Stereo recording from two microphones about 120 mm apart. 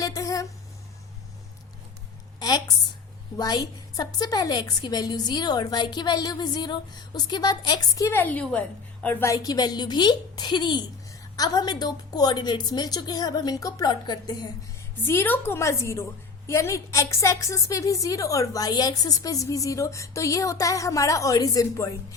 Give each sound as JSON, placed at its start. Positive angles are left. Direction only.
{"t": 0.0, "sound": "a sound", "side_deg": 30}
{"t": 3.3, "sound": "a woman's voice", "side_deg": 35}
{"t": 8.2, "sound": "a woman's voice", "side_deg": 10}
{"t": 9.3, "sound": "a woman's voice", "side_deg": 30}
{"t": 15.0, "sound": "a woman's voice", "side_deg": 20}